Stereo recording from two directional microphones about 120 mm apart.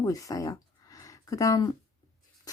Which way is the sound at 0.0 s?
30° left (ahead or behind).